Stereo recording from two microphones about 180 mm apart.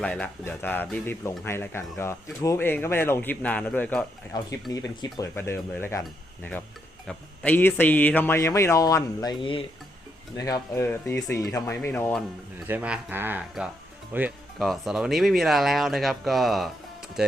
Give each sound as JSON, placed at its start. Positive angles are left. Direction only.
{"t": 0.0, "sound": "speech", "side_deg": 5}
{"t": 4.7, "sound": "speech", "side_deg": 20}
{"t": 7.1, "sound": "speech", "side_deg": 10}
{"t": 12.6, "sound": "speech", "side_deg": -10}